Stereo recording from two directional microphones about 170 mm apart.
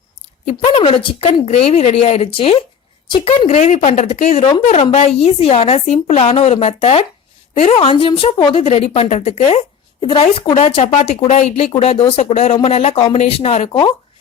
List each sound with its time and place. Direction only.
0.4 s a woman's voice: 35° left (ahead or behind)